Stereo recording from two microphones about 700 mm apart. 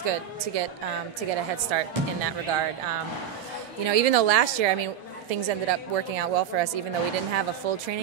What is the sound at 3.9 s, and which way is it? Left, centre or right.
A woman's voice, right.